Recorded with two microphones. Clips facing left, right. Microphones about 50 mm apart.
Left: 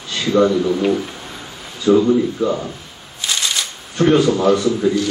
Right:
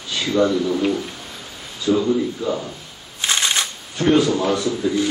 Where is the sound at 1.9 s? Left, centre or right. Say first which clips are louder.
Left 6 dB; left.